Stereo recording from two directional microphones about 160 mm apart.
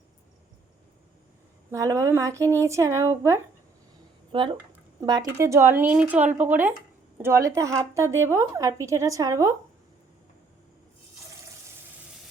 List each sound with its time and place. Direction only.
1.7 s a woman's voice: 20° right (ahead or behind)
4.3 s a woman's voice: 30° right (ahead or behind)